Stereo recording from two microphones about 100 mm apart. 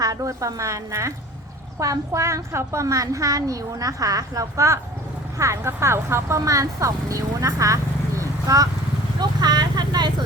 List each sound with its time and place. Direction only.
0.0 s a woman's voice: 35° right (ahead or behind)
9.4 s vehicle: 45° right (ahead or behind)